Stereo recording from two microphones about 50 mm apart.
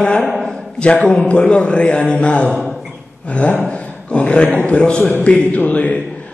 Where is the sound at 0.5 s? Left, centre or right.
Centre.